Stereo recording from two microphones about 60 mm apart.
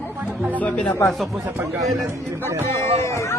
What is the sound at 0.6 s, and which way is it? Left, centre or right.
Speech, left.